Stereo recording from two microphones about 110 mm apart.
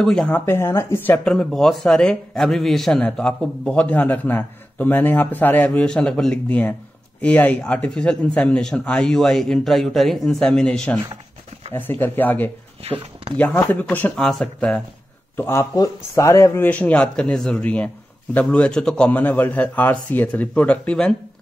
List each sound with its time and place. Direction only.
0.0 s speech: 5° left (ahead or behind)
0.5 s speech: 25° left (ahead or behind)
1.2 s speech: 5° left (ahead or behind)
11.7 s speech: 20° left (ahead or behind)
15.3 s speech: 20° left (ahead or behind)
15.7 s speech: 30° left (ahead or behind); by 21.1 s 10° left (ahead or behind)